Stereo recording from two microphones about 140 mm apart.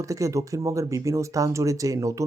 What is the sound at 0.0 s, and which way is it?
Speech, 25° right (ahead or behind).